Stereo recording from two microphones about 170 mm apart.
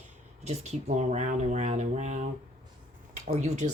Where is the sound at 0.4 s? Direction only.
40° right (ahead or behind).